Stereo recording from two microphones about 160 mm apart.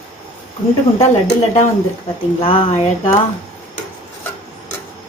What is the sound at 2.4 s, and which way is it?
Speech, 35° left (ahead or behind).